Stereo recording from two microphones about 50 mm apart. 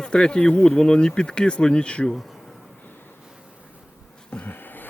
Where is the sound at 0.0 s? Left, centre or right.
Centre.